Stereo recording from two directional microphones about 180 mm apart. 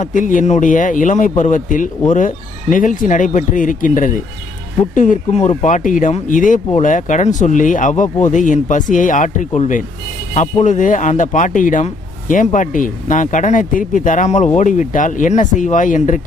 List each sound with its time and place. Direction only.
0.0 s speech: 45° left (ahead or behind)